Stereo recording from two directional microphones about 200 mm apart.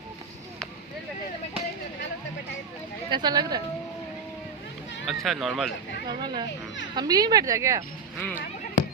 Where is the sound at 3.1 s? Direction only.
20° right (ahead or behind).